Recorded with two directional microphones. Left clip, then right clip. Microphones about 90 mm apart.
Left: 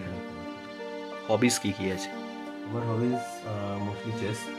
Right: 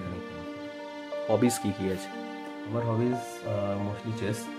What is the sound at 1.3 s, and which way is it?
Speech, 25° right (ahead or behind).